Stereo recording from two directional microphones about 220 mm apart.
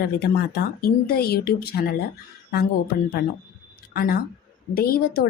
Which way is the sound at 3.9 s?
40° left (ahead or behind).